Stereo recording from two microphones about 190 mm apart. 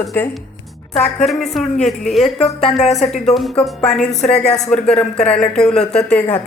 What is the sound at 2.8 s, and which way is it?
Speech, 35° left (ahead or behind).